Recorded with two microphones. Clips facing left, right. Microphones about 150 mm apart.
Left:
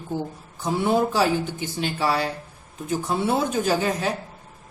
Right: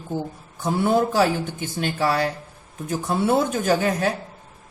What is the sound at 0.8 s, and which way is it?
A woman's voice, 50° right (ahead or behind).